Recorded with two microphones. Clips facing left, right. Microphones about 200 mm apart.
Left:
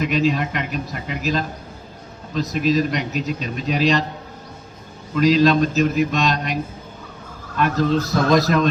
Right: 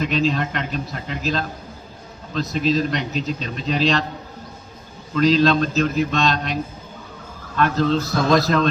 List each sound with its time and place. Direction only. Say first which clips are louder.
0.0 s a man's voice: left 1 dB; 10° left (ahead or behind)
2.5 s a man's voice: left 1 dB; 10° left (ahead or behind)
5.1 s a man's voice: left 1 dB; 10° left (ahead or behind)